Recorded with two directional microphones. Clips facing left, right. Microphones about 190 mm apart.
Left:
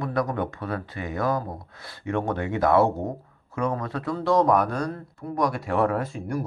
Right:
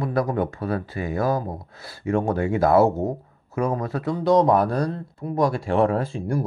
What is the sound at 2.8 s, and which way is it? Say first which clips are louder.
Speech: right 4 dB; 5° right (ahead or behind).